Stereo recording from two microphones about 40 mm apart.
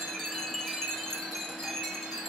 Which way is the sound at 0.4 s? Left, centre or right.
Centre.